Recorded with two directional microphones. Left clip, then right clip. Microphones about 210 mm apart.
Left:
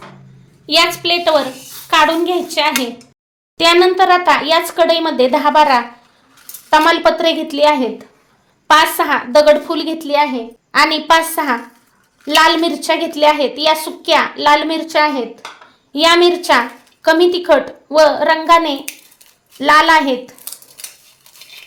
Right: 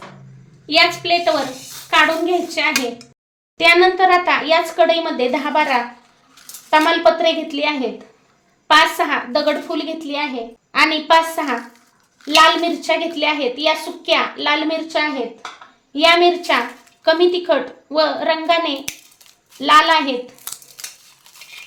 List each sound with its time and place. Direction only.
0.7 s a child's voice: 40° left (ahead or behind)